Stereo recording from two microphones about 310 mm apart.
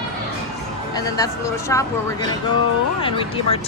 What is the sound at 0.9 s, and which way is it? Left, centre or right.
Speech, centre.